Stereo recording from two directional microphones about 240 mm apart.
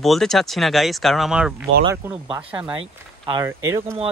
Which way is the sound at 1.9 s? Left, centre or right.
Centre.